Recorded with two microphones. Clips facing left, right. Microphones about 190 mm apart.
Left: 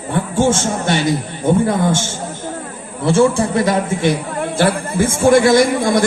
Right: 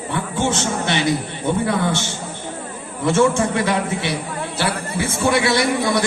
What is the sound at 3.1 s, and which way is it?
A man's voice, 35° left (ahead or behind).